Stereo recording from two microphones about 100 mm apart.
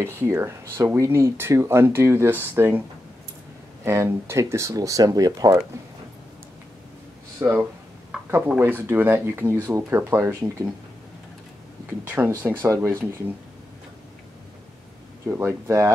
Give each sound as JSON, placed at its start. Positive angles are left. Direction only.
{"t": 0.0, "sound": "speech", "side_deg": -30}
{"t": 3.8, "sound": "speech", "side_deg": -25}
{"t": 7.3, "sound": "speech", "side_deg": -25}
{"t": 8.1, "sound": "a sound", "side_deg": -5}
{"t": 8.5, "sound": "speech", "side_deg": -20}
{"t": 12.3, "sound": "speech", "side_deg": -30}
{"t": 15.2, "sound": "speech", "side_deg": -25}